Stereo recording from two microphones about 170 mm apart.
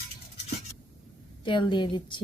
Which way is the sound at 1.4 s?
25° left (ahead or behind).